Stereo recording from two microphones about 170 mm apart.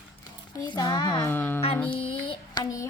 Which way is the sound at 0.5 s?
25° left (ahead or behind).